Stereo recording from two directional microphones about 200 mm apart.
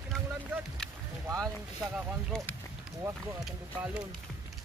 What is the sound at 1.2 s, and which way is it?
Boat, 15° right (ahead or behind).